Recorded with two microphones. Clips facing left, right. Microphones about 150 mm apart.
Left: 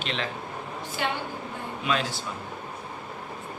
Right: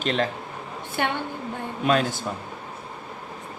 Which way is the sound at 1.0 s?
60° right (ahead or behind).